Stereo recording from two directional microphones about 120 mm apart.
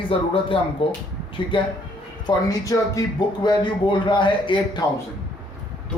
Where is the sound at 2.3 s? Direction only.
30° left (ahead or behind).